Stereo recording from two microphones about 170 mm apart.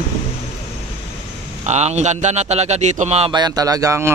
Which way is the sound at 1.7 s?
40° right (ahead or behind).